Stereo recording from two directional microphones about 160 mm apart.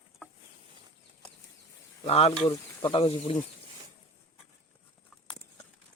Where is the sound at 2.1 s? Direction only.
40° left (ahead or behind).